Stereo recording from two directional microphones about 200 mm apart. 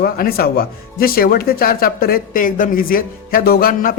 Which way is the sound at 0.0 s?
50° left (ahead or behind).